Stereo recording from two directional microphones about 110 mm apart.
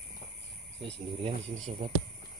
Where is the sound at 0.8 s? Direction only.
55° right (ahead or behind).